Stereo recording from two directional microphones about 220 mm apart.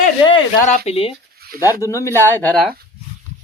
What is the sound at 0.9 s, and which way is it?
Speech, 25° left (ahead or behind).